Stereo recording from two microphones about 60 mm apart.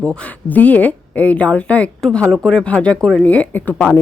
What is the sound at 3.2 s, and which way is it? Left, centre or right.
Speech, left.